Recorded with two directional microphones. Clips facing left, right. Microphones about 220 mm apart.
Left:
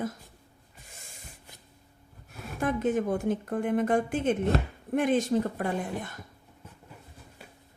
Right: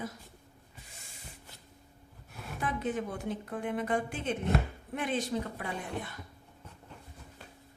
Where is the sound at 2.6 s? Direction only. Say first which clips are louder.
Left 7 dB; 45° left (ahead or behind).